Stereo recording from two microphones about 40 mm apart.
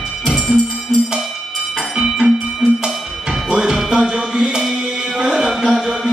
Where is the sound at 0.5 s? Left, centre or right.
Right.